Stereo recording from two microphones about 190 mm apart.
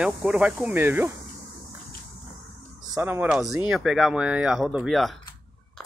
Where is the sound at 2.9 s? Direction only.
10° right (ahead or behind).